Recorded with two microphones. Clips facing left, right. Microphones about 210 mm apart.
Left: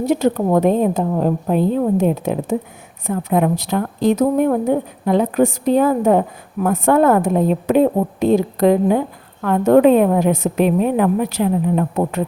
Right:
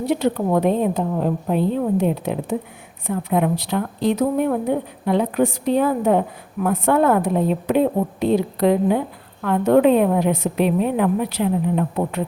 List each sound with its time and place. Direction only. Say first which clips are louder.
0.0 s a woman's voice: left 3 dB; 45° left (ahead or behind)